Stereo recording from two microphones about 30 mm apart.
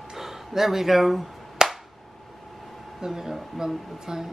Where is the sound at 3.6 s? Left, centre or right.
Centre.